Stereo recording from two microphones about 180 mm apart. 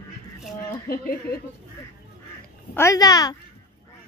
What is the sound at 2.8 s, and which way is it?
Speech, 20° left (ahead or behind).